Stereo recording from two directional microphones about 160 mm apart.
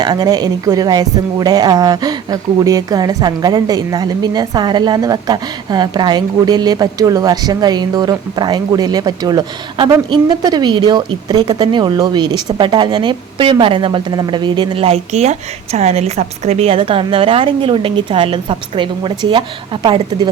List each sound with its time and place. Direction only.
0.0 s a woman's voice: 25° right (ahead or behind)